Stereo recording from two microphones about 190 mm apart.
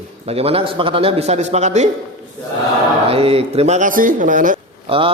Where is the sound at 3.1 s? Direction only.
30° right (ahead or behind).